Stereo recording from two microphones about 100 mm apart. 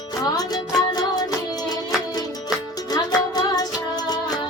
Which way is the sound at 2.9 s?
40° left (ahead or behind).